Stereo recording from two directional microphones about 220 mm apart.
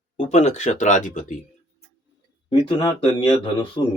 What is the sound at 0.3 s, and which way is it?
Speech, 30° left (ahead or behind).